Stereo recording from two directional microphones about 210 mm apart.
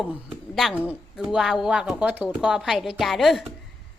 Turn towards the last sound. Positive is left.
turn(degrees=0)  # may be behind; listen again after turning